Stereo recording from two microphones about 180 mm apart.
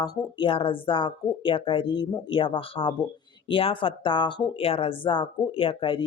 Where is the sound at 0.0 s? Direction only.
30° left (ahead or behind).